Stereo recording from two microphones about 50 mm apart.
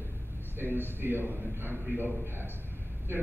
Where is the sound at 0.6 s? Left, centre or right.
Right.